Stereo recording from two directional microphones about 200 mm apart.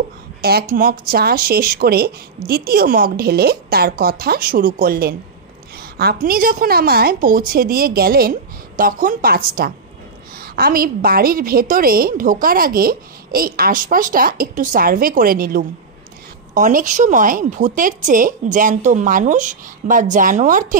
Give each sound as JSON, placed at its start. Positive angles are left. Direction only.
{"t": 0.4, "sound": "a woman's voice", "side_deg": -50}
{"t": 5.8, "sound": "a sound", "side_deg": -50}
{"t": 6.2, "sound": "a woman's voice", "side_deg": -45}